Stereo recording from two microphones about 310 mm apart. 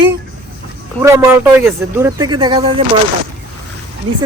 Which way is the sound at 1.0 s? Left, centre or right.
Centre.